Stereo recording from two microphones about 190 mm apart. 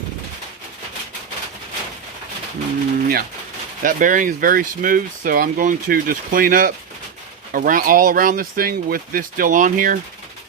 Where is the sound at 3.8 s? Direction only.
45° right (ahead or behind).